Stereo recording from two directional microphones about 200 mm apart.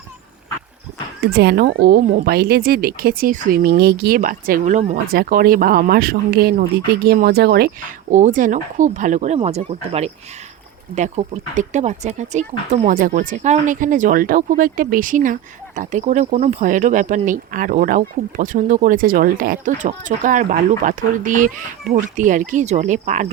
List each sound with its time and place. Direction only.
1.3 s a woman's voice: 55° right (ahead or behind); by 5.1 s 35° right (ahead or behind)
5.1 s a woman's voice: 50° right (ahead or behind)
8.1 s speech: 40° right (ahead or behind)